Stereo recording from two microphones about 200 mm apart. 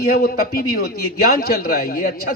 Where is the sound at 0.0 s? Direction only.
50° left (ahead or behind).